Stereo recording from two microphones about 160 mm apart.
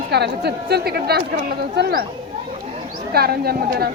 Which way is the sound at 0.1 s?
90° right.